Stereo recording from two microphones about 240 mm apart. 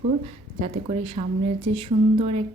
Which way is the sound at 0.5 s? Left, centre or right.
Right.